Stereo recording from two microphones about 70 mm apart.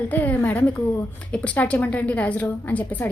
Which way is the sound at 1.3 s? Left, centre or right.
Centre.